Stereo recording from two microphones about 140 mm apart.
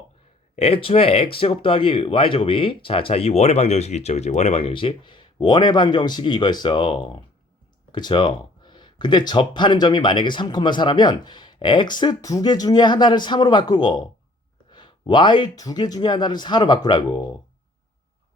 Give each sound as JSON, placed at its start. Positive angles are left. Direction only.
{"t": 0.5, "sound": "speech", "side_deg": 45}